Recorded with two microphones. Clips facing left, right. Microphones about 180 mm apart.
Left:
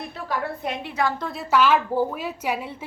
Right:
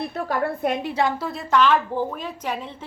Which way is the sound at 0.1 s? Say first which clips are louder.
Right 4 dB; 50° right (ahead or behind).